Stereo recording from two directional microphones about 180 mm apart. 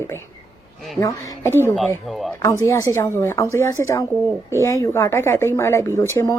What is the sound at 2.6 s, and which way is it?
Speech, 15° left (ahead or behind).